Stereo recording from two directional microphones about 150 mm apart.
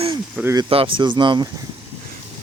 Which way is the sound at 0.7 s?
35° right (ahead or behind).